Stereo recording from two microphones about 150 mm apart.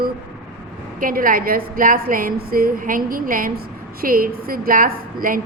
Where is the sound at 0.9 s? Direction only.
65° right (ahead or behind).